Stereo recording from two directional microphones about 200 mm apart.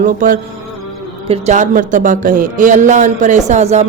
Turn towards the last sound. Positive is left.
turn(degrees=-35)  # may be behind; listen again after turning